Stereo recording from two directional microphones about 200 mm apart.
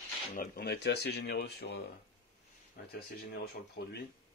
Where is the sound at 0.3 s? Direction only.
40° left (ahead or behind).